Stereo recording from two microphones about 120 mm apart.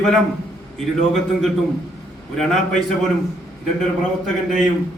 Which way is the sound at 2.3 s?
5° left (ahead or behind).